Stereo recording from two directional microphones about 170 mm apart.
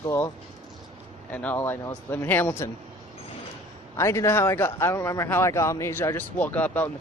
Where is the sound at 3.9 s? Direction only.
15° left (ahead or behind).